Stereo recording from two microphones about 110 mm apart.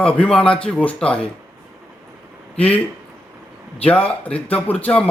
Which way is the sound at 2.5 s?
10° left (ahead or behind).